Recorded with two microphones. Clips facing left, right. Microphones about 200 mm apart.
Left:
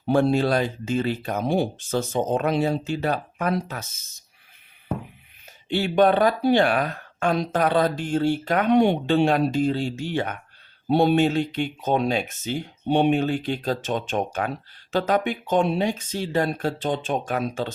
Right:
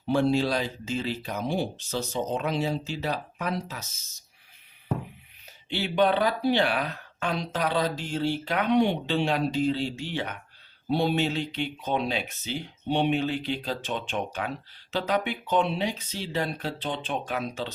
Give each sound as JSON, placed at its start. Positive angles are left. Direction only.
{"t": 0.0, "sound": "speech", "side_deg": 55}
{"t": 5.6, "sound": "speech", "side_deg": 45}